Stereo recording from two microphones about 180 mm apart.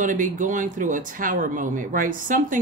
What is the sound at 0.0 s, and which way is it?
Speech, 45° right (ahead or behind).